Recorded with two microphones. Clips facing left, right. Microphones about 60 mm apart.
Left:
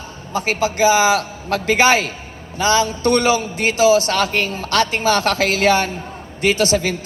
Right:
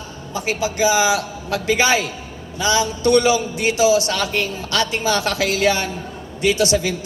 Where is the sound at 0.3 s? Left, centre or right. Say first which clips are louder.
Left 3 dB; left.